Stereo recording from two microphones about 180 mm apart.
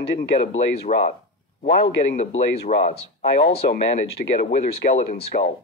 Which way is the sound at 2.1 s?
35° left (ahead or behind).